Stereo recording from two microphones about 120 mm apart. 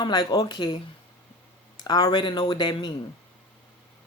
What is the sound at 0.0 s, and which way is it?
Speech, 35° left (ahead or behind).